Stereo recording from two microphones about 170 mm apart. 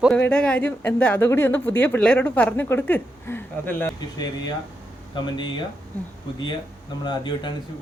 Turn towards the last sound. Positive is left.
turn(degrees=25)  # may be behind; listen again after turning